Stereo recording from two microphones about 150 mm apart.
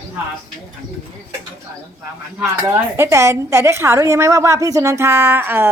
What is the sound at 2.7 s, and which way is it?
A woman's voice, 15° right (ahead or behind).